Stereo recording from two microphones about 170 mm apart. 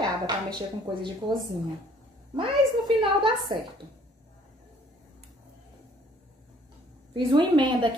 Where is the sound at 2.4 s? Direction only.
30° right (ahead or behind).